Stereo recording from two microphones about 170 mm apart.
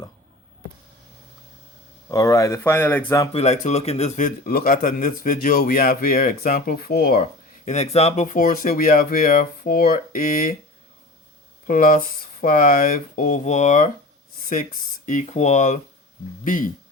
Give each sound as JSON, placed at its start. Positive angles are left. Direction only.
{"t": 2.0, "sound": "speech", "side_deg": 20}
{"t": 3.3, "sound": "speech", "side_deg": 40}
{"t": 4.4, "sound": "speech", "side_deg": 60}
{"t": 7.2, "sound": "speech", "side_deg": 45}
{"t": 11.6, "sound": "speech", "side_deg": 55}